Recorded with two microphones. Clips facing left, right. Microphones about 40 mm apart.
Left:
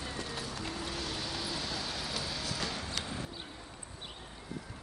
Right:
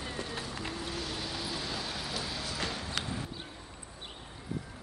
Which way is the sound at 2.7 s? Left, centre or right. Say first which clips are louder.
Right 2 dB; centre.